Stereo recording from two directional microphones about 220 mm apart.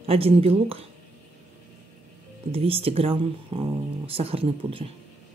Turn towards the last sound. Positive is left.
turn(degrees=-25)  # may be behind; listen again after turning